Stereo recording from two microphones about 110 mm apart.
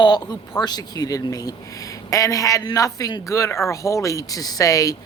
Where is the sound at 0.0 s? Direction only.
40° left (ahead or behind).